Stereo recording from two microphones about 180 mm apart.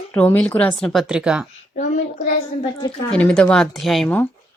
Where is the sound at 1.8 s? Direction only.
45° left (ahead or behind).